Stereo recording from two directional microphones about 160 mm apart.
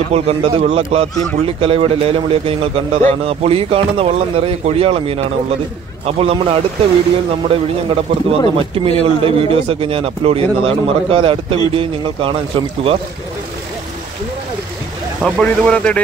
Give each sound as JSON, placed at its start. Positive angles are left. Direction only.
{"t": 0.1, "sound": "a man's voice", "side_deg": -40}
{"t": 15.3, "sound": "speech", "side_deg": 5}